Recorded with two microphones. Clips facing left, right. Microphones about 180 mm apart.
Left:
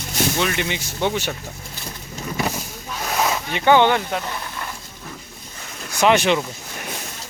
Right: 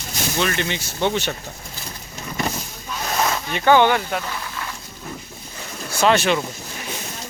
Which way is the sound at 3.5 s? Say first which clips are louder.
Even; 20° left (ahead or behind).